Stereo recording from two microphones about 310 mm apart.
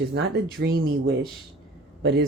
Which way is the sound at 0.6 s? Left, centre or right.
Right.